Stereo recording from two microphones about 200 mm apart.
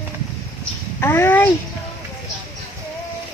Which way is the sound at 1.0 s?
10° left (ahead or behind).